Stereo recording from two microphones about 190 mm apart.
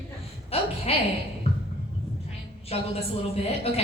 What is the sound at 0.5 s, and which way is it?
Speech, 30° left (ahead or behind).